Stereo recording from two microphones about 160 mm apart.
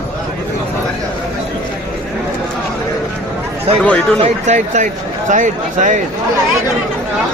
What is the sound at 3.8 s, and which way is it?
Speech, 5° left (ahead or behind).